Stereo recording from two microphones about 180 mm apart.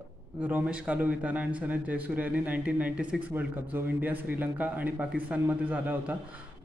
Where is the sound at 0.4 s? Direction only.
10° right (ahead or behind).